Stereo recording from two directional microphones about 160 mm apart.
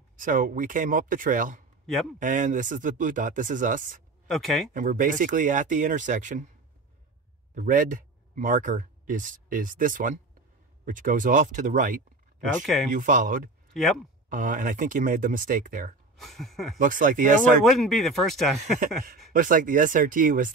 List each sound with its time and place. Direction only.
0.1 s speech: 55° right (ahead or behind)
1.9 s speech: centre (ahead or behind)
2.1 s speech: 55° right (ahead or behind)
4.3 s speech: centre (ahead or behind)
4.7 s speech: 55° right (ahead or behind)
7.5 s speech: 55° right (ahead or behind)
13.7 s speech: centre (ahead or behind)
14.3 s speech: 55° right (ahead or behind)
16.2 s speech: centre (ahead or behind)
16.7 s speech: 55° right (ahead or behind)
17.6 s speech: centre (ahead or behind)
19.3 s speech: 55° right (ahead or behind)